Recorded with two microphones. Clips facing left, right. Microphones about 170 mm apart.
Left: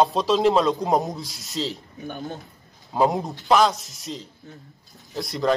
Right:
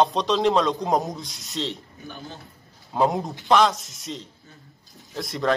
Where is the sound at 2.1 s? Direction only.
45° left (ahead or behind).